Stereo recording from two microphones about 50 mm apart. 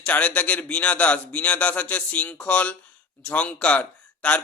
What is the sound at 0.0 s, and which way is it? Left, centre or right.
Speech, left.